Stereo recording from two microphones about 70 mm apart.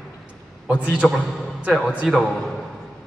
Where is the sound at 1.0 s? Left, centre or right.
Centre.